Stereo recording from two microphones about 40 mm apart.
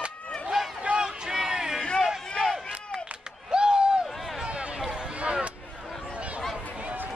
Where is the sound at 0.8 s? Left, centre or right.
Right.